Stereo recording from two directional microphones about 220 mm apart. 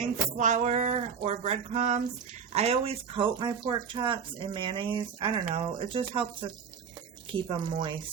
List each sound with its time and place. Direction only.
0.3 s speech: 35° right (ahead or behind)